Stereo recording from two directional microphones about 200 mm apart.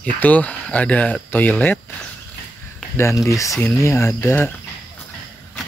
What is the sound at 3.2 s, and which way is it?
Speech, 15° left (ahead or behind).